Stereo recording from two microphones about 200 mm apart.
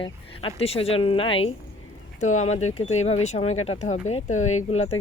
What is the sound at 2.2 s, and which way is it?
Speech, 35° left (ahead or behind).